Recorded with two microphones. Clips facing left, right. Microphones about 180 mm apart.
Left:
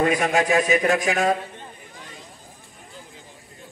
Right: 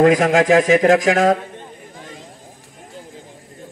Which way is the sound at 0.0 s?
90° right.